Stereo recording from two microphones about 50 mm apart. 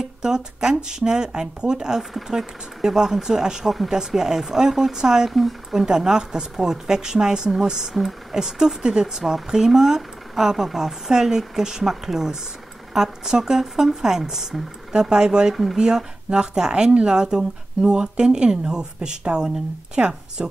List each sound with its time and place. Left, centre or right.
0.2 s speech: centre